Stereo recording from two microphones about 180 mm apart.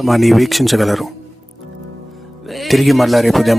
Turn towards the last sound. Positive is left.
turn(degrees=0)  # may be behind; listen again after turning